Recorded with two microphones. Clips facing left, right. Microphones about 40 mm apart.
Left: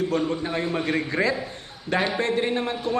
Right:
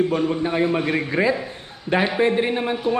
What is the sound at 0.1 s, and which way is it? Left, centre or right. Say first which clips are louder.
A man's voice: right 4 dB; centre.